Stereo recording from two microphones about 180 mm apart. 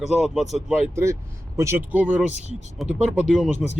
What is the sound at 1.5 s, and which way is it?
Speech, 15° right (ahead or behind).